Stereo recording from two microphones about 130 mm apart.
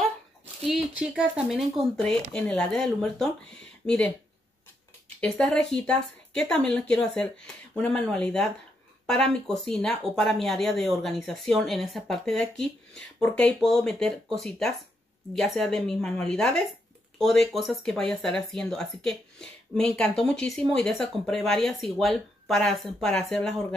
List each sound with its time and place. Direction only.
0.7 s speech: 5° right (ahead or behind)
5.2 s speech: 5° left (ahead or behind)